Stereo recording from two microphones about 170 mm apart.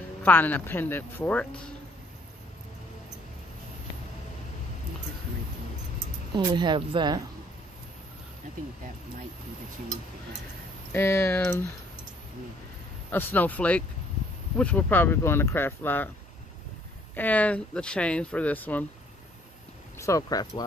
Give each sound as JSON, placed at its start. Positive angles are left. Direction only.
{"t": 0.2, "sound": "speech", "side_deg": 10}
{"t": 6.3, "sound": "a woman's voice", "side_deg": -25}
{"t": 10.9, "sound": "speech", "side_deg": 15}
{"t": 13.1, "sound": "speech", "side_deg": 10}
{"t": 17.1, "sound": "speech", "side_deg": 10}
{"t": 20.0, "sound": "speech", "side_deg": 20}